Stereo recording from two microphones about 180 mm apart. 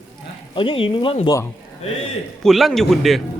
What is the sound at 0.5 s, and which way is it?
Speech, 30° left (ahead or behind).